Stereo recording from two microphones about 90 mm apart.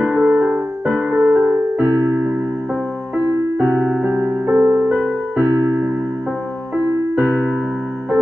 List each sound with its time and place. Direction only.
0.0 s music: 20° right (ahead or behind)
3.5 s music: 30° right (ahead or behind)
4.8 s music: 10° right (ahead or behind)